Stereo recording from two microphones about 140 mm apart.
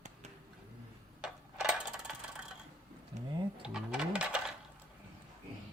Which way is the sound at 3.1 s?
55° right (ahead or behind).